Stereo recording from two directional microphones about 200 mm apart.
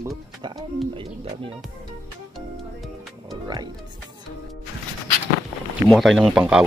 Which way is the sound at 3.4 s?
20° right (ahead or behind).